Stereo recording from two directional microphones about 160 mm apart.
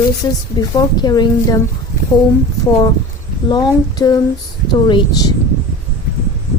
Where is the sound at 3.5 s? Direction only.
25° left (ahead or behind).